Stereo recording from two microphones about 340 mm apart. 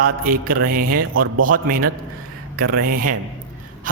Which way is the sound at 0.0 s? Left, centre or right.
Right.